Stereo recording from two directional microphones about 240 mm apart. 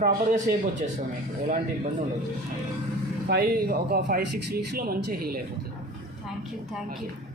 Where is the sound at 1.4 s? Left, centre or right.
Right.